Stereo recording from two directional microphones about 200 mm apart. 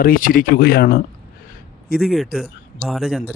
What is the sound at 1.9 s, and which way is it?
A man's voice, centre (ahead or behind).